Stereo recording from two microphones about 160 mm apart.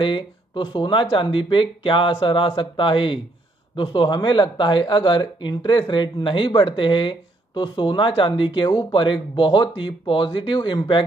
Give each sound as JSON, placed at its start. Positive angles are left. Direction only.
{"t": 0.0, "sound": "speech", "side_deg": 30}